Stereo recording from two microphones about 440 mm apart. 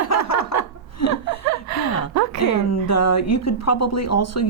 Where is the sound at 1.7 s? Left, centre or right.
Right.